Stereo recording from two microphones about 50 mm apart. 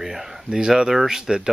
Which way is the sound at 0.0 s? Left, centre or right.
Centre.